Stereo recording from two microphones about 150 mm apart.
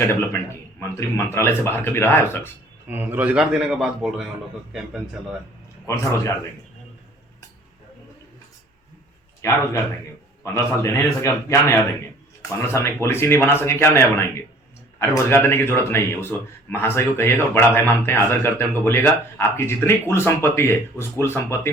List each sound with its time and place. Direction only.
0.8 s speech: 20° left (ahead or behind)
2.8 s a man's voice: 10° right (ahead or behind)
5.8 s speech: 20° left (ahead or behind)
9.4 s a man's voice: 20° left (ahead or behind)